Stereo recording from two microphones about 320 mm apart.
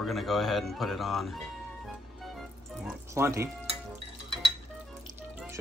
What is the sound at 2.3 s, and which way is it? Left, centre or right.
Music, centre.